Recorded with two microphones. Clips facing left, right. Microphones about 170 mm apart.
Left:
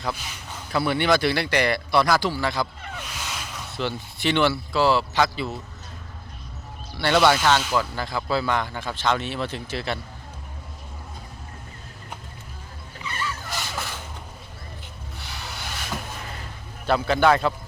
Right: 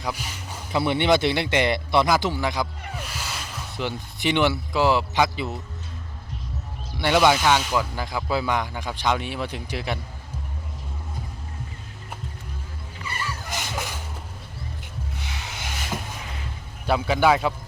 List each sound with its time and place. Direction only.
0.0 s music: 10° right (ahead or behind)
0.8 s speech: 20° right (ahead or behind)
6.9 s speech: 15° right (ahead or behind)
13.1 s vehicle: 10° right (ahead or behind)
15.4 s a sound: 20° right (ahead or behind)
16.8 s speech: 10° right (ahead or behind)